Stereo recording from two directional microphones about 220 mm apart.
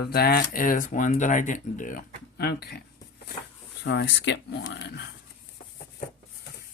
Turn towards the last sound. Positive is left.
turn(degrees=50)  # may be behind; listen again after turning